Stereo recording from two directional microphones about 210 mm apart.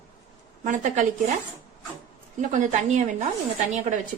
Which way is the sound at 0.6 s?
35° right (ahead or behind).